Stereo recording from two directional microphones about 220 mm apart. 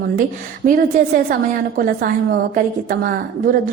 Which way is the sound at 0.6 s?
40° right (ahead or behind).